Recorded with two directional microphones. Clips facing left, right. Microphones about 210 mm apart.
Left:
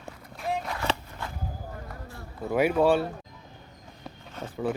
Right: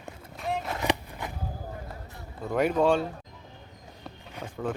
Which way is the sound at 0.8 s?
15° right (ahead or behind).